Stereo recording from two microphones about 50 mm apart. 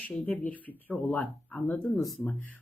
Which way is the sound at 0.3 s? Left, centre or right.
Left.